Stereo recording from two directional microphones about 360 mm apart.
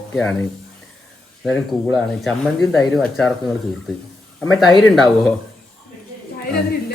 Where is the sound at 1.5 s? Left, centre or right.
Centre.